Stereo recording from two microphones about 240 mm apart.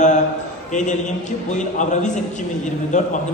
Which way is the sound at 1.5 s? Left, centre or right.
Left.